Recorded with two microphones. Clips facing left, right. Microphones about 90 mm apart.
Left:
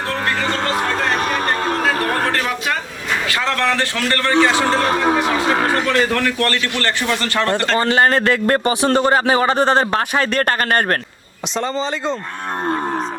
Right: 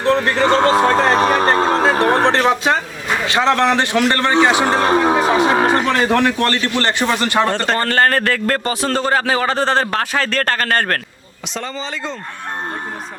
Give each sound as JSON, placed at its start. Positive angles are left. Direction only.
{"t": 0.3, "sound": "a sound", "side_deg": -35}
{"t": 3.2, "sound": "speech", "side_deg": -20}
{"t": 7.8, "sound": "a man's voice", "side_deg": 15}